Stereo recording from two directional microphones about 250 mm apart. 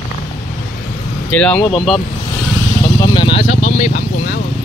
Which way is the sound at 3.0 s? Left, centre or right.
Centre.